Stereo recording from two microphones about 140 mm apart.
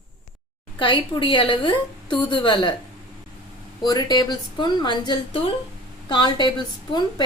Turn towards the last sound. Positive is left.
turn(degrees=30)  # may be behind; listen again after turning